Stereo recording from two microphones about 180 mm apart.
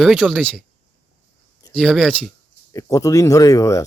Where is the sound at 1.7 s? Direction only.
5° left (ahead or behind).